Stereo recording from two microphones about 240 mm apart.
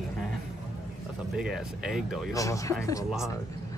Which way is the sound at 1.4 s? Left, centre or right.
Centre.